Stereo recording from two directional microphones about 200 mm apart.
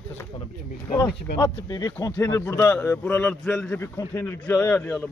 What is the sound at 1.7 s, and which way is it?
A man's voice, 20° left (ahead or behind).